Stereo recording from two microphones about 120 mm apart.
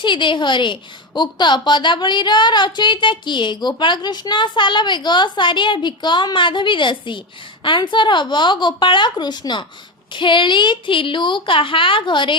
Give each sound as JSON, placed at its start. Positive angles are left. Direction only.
{"t": 0.0, "sound": "a woman's voice", "side_deg": 40}